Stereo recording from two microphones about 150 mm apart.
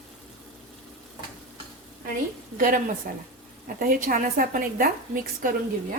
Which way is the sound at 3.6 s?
70° right (ahead or behind).